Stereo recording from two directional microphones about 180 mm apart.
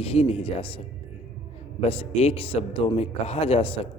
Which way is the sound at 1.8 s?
35° left (ahead or behind).